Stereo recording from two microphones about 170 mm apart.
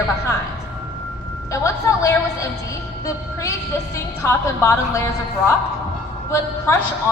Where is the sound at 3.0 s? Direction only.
20° left (ahead or behind).